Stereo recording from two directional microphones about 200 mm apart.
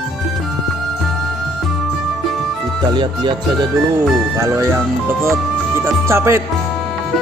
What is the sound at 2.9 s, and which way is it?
Speech, 25° right (ahead or behind).